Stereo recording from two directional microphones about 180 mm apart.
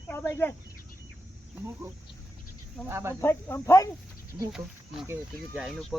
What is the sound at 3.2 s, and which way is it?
Speech, 10° left (ahead or behind).